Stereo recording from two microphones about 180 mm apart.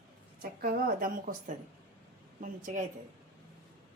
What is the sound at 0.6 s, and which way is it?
Speech, 50° right (ahead or behind).